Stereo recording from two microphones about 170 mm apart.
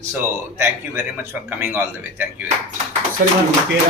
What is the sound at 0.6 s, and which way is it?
A man's voice, 15° right (ahead or behind).